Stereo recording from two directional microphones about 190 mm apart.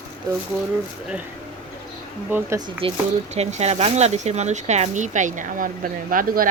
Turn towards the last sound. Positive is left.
turn(degrees=-45)  # may be behind; listen again after turning